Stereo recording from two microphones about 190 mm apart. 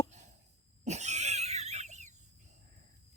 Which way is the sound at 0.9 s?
35° right (ahead or behind).